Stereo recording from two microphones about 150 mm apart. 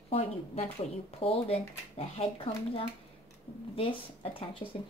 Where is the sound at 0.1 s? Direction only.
40° left (ahead or behind).